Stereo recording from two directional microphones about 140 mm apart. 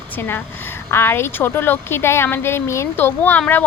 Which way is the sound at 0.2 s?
15° left (ahead or behind).